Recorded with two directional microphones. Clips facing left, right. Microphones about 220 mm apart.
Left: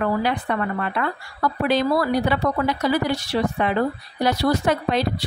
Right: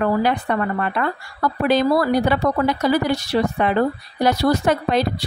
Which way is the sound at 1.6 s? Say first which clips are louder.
Right 3 dB; 45° right (ahead or behind).